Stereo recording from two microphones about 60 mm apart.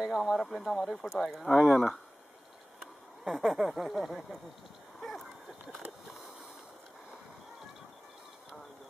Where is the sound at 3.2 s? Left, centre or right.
Centre.